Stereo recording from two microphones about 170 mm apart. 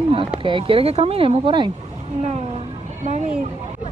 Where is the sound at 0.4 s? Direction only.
30° right (ahead or behind).